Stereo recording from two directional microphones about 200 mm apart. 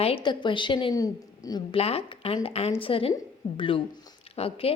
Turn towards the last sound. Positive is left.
turn(degrees=30)  # may be behind; listen again after turning